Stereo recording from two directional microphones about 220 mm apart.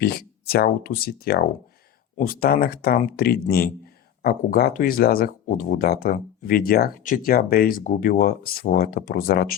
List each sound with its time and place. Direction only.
0.0 s speech: 45° left (ahead or behind)